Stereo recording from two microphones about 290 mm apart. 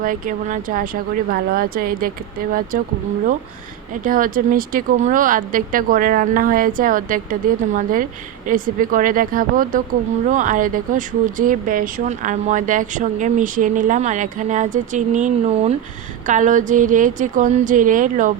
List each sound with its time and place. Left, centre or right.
0.0 s speech: right
4.0 s speech: right